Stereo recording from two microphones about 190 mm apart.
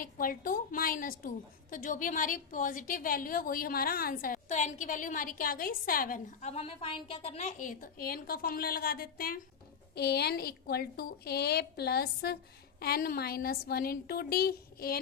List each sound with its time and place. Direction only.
0.0 s a woman's voice: 50° left (ahead or behind)